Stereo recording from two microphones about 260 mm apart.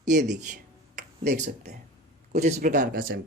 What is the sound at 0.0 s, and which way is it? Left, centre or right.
Speech, right.